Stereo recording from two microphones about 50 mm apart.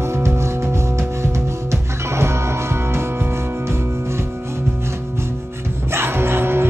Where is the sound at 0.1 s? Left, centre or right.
Right.